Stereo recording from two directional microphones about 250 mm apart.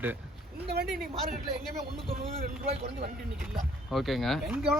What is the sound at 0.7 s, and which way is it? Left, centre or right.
Speech, right.